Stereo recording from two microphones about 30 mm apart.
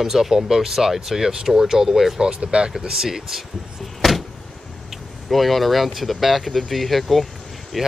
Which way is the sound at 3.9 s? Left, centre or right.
Centre.